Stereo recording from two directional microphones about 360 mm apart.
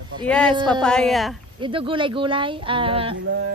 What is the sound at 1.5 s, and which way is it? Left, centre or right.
Speech, centre.